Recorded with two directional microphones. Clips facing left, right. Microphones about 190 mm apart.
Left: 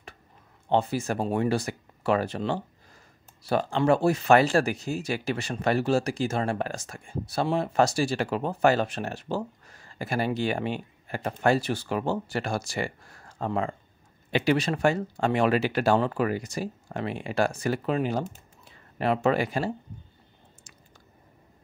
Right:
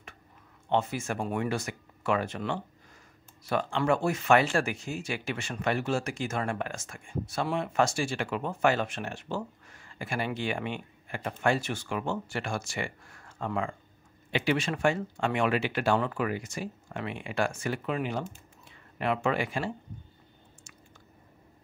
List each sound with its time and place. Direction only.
0.7 s speech: 35° left (ahead or behind)